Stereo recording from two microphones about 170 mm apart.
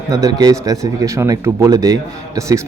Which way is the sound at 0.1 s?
20° right (ahead or behind).